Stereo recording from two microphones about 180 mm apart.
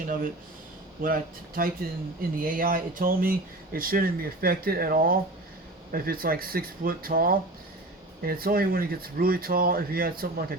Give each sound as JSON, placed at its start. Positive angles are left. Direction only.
{"t": 0.0, "sound": "speech", "side_deg": -50}